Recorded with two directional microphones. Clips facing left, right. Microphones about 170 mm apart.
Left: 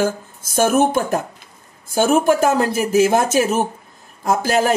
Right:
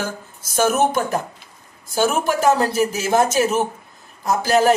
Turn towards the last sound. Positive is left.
turn(degrees=50)  # may be behind; listen again after turning